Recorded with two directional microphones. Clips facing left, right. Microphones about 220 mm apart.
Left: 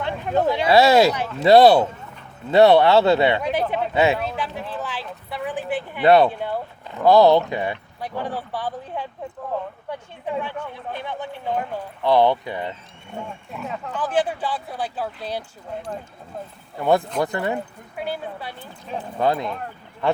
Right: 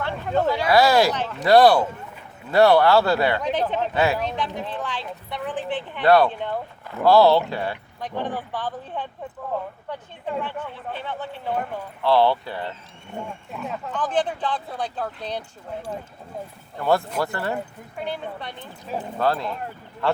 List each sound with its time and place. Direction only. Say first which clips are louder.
0.0 s speech: left 1 dB; 20° left (ahead or behind)
3.4 s speech: left 1 dB; 10° left (ahead or behind)
3.9 s speech: left 4 dB; 20° left (ahead or behind)
4.2 s speech: right 1 dB; 5° left (ahead or behind)
6.1 s speech: left 2 dB; 20° left (ahead or behind)
6.4 s speech: left 1 dB; 10° left (ahead or behind)
10.4 s speech: left 1 dB; 15° left (ahead or behind)
13.1 s speech: even; centre (ahead or behind)
16.7 s speech: left 2 dB; 15° left (ahead or behind)
19.2 s speech: left 2 dB; 20° left (ahead or behind)